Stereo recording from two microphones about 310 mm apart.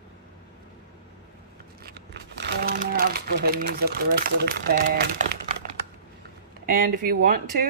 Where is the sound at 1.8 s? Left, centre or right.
Right.